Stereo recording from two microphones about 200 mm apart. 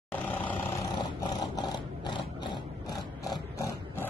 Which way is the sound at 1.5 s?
20° left (ahead or behind).